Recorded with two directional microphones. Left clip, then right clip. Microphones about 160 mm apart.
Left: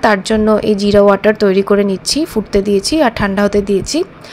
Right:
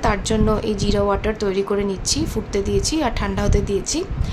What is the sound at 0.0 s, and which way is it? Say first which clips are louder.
A woman's voice: left 8 dB; 35° left (ahead or behind).